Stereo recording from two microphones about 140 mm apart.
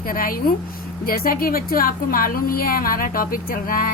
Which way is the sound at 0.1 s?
90° left.